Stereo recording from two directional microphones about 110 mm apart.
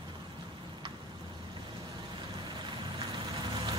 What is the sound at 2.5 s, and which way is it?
Vehicle, 45° right (ahead or behind).